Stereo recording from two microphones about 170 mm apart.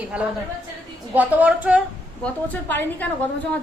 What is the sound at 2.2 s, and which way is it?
Speech, 10° left (ahead or behind).